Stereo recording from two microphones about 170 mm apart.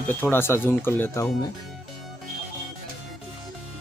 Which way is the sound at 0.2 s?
15° left (ahead or behind).